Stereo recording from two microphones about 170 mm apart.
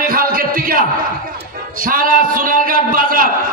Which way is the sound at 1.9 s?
55° right (ahead or behind).